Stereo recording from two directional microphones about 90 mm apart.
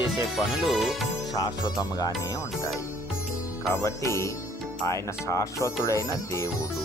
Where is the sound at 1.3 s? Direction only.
45° left (ahead or behind).